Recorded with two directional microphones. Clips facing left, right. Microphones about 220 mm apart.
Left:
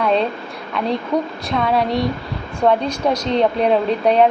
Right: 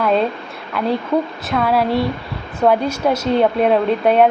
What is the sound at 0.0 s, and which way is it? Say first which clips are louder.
Speech: right 1 dB; 5° right (ahead or behind).